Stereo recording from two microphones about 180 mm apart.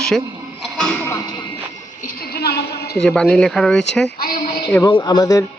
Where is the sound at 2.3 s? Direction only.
60° left (ahead or behind).